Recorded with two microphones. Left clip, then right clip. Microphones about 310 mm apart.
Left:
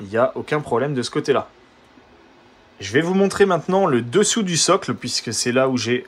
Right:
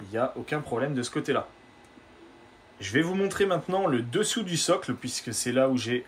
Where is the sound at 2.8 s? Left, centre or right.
Centre.